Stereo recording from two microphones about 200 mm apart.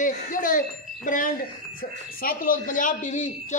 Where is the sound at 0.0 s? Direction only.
40° left (ahead or behind).